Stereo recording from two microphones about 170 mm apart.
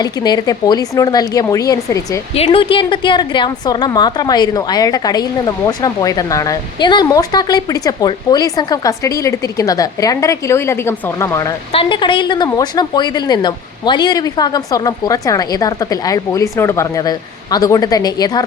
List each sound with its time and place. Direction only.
0.0 s a woman's voice: 25° left (ahead or behind)
2.3 s a woman's voice: 35° left (ahead or behind); by 11.5 s 20° left (ahead or behind)
11.7 s a woman's voice: 30° left (ahead or behind)